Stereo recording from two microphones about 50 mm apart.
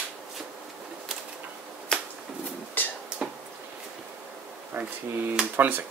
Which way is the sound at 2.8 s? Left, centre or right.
Left.